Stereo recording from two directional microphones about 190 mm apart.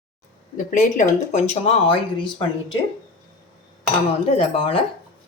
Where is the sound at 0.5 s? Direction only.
45° left (ahead or behind).